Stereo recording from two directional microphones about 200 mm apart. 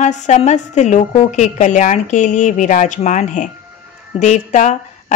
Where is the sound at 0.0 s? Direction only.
35° left (ahead or behind).